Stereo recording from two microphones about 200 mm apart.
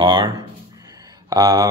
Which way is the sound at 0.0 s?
20° right (ahead or behind).